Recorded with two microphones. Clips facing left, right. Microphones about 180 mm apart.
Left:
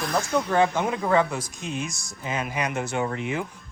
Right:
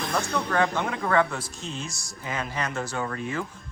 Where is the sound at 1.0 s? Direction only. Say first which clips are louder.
Even; 15° left (ahead or behind).